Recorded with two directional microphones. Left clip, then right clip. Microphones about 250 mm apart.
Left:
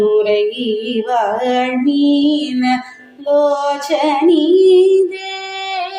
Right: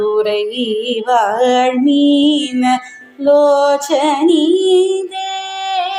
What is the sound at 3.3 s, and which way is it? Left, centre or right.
Music, right.